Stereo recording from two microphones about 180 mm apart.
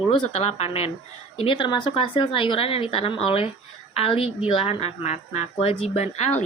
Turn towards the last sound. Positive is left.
turn(degrees=40)  # may be behind; listen again after turning